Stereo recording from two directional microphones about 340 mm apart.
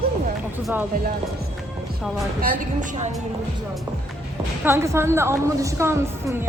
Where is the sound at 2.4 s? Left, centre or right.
Right.